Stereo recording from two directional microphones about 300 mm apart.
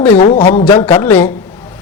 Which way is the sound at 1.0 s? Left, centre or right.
Centre.